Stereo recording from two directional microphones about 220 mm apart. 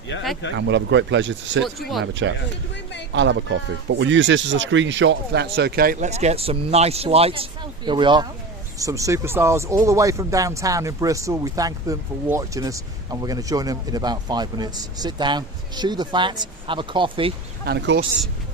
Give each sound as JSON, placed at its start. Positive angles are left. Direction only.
{"t": 0.5, "sound": "speech", "side_deg": -55}
{"t": 17.7, "sound": "speech", "side_deg": -50}